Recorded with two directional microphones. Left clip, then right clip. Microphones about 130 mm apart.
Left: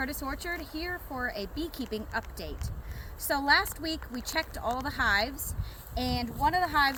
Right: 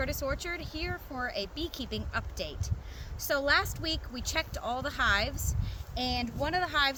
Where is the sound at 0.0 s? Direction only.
35° right (ahead or behind).